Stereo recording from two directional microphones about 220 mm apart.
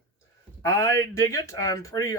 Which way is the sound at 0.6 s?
15° left (ahead or behind).